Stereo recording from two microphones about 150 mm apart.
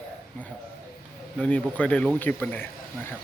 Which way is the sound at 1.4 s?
10° left (ahead or behind).